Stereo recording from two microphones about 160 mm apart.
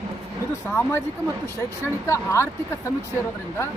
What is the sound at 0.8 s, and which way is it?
Speech, 15° left (ahead or behind).